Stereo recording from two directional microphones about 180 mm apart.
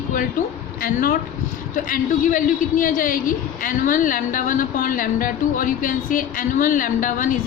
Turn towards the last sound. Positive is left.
turn(degrees=50)  # may be behind; listen again after turning